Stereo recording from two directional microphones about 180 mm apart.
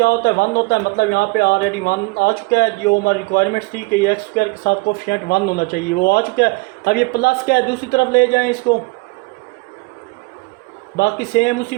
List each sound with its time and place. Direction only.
0.0 s a man's voice: 60° left (ahead or behind)
10.9 s a man's voice: 65° left (ahead or behind)